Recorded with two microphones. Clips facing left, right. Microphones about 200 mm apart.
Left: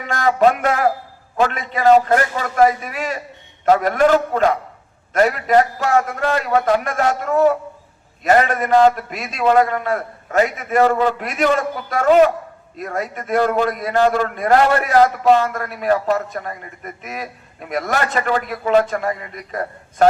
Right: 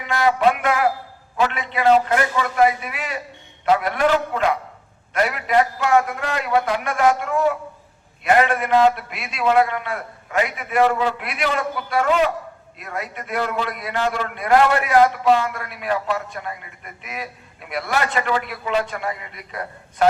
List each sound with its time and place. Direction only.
0.1 s a man's voice: 45° left (ahead or behind)